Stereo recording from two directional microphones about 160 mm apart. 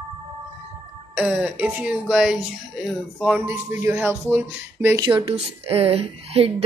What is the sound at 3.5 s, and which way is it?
Speech, 15° right (ahead or behind).